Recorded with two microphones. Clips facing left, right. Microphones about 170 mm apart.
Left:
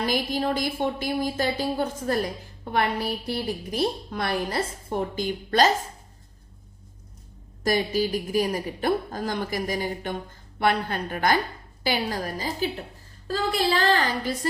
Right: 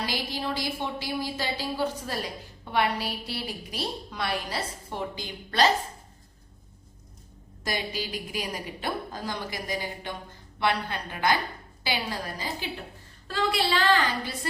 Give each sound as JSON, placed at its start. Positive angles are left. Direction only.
{"t": 0.0, "sound": "a woman's voice", "side_deg": 50}
{"t": 7.6, "sound": "a woman's voice", "side_deg": 45}